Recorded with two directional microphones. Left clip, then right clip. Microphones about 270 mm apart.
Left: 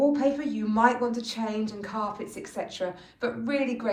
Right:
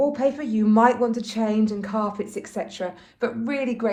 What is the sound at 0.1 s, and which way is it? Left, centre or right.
Speech, right.